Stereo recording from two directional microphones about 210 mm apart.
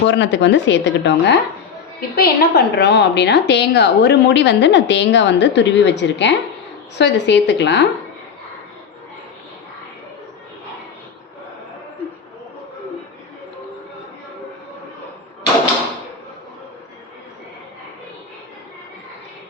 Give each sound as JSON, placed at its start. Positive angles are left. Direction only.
{"t": 0.0, "sound": "a woman's voice", "side_deg": 60}